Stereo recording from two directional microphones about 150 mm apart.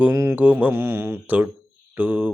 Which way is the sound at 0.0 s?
15° right (ahead or behind).